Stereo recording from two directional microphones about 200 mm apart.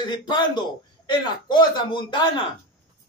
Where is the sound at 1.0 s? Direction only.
20° left (ahead or behind).